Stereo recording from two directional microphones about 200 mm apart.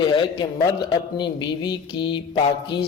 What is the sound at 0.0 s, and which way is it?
A man's voice, 25° left (ahead or behind).